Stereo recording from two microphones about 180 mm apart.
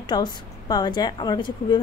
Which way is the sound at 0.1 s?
25° left (ahead or behind).